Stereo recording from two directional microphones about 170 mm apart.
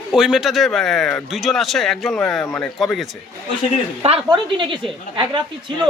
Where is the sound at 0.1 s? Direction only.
5° right (ahead or behind).